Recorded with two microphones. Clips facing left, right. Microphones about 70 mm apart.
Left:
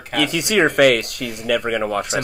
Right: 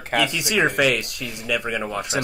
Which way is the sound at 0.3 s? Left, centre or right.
Left.